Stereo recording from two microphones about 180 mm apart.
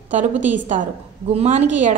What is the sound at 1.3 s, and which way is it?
Speech, 35° right (ahead or behind).